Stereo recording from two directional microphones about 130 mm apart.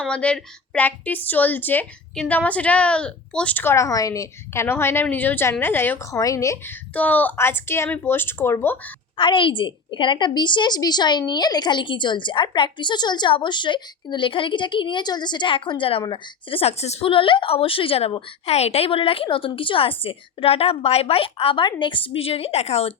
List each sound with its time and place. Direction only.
0.0 s a woman's voice: 10° left (ahead or behind)
6.9 s a woman's voice: 10° left (ahead or behind)
9.1 s a woman's voice: 40° left (ahead or behind)